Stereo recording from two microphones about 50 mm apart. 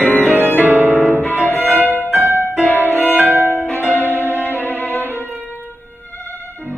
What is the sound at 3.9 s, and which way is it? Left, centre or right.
Music, left.